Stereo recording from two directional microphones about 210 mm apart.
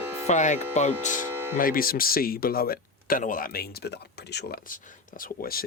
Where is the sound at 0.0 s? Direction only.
10° right (ahead or behind).